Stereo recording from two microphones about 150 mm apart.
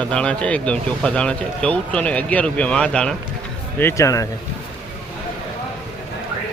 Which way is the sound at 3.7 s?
15° left (ahead or behind).